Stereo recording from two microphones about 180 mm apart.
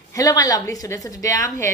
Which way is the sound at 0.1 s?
20° left (ahead or behind).